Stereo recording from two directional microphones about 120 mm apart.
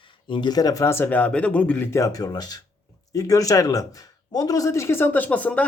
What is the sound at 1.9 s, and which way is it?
Speech, 30° left (ahead or behind).